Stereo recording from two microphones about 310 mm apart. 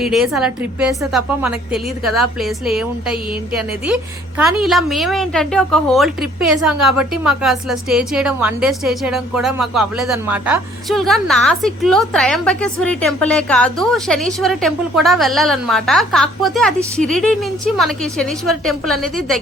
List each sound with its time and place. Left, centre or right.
0.0 s a woman's voice: centre
3.8 s a woman's voice: centre